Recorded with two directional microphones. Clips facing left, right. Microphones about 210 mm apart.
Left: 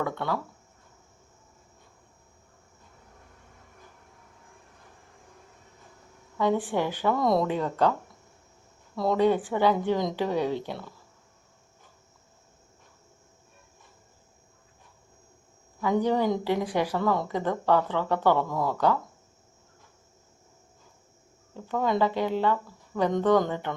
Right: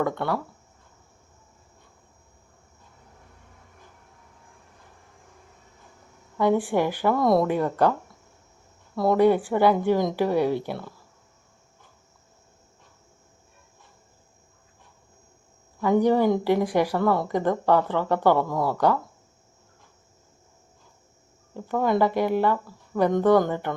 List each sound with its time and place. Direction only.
0.0 s speech: 15° right (ahead or behind)
6.3 s speech: 10° right (ahead or behind)
9.0 s speech: 10° right (ahead or behind)
15.8 s speech: 15° right (ahead or behind)
21.5 s speech: 10° right (ahead or behind)